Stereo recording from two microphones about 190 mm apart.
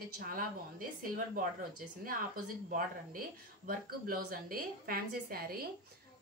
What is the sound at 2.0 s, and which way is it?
Speech, 50° right (ahead or behind).